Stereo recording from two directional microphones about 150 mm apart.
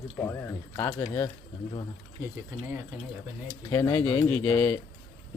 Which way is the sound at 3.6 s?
20° left (ahead or behind).